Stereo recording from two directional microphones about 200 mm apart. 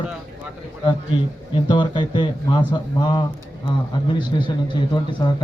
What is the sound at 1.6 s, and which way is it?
A man's voice, 25° left (ahead or behind).